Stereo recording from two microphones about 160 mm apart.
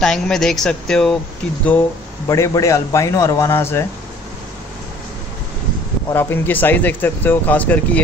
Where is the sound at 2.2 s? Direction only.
20° left (ahead or behind).